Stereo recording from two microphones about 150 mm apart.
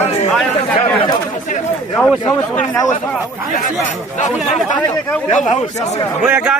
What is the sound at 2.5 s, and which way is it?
Speech, 15° left (ahead or behind).